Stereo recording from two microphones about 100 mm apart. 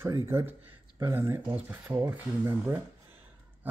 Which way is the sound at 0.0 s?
25° right (ahead or behind).